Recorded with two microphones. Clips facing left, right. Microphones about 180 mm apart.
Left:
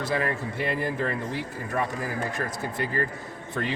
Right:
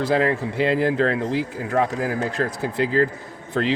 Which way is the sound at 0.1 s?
90° right.